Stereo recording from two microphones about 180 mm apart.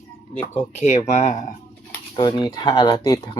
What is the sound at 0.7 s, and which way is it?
Speech, 40° left (ahead or behind).